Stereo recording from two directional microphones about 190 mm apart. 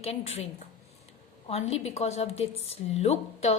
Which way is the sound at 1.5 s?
35° left (ahead or behind).